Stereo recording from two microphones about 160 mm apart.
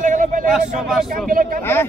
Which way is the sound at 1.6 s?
15° left (ahead or behind).